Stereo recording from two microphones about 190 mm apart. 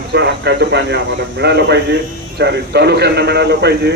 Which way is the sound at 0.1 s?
65° right (ahead or behind).